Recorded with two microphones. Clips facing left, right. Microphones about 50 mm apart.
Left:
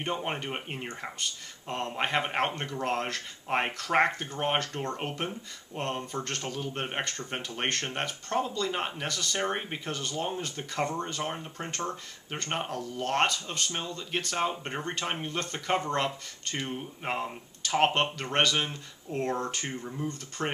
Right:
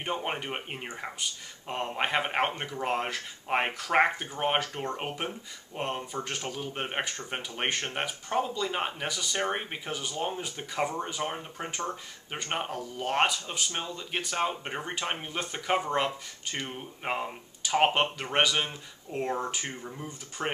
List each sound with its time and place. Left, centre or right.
0.0 s speech: centre